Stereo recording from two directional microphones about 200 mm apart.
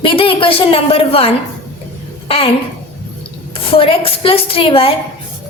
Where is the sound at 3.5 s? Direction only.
25° left (ahead or behind).